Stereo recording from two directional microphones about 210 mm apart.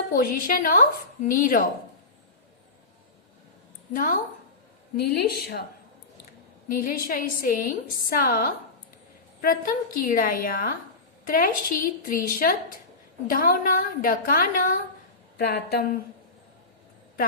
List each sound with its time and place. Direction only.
0.1 s a woman's voice: 40° left (ahead or behind)
3.9 s a woman's voice: 40° left (ahead or behind)
6.7 s a woman's voice: 40° left (ahead or behind)